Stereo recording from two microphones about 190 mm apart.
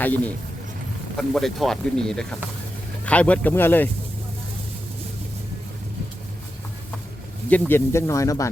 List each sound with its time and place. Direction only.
0.0 s speech: 10° left (ahead or behind)
7.5 s speech: 15° left (ahead or behind)